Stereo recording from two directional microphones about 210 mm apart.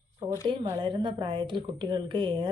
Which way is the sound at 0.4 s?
20° right (ahead or behind).